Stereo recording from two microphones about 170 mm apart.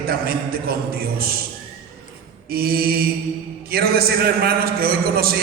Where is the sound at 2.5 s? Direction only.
60° right (ahead or behind).